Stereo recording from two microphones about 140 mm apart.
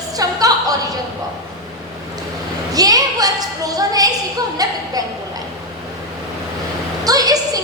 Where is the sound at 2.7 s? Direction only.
25° right (ahead or behind).